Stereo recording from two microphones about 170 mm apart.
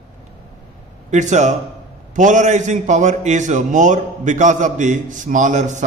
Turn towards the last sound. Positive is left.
turn(degrees=-45)  # may be behind; listen again after turning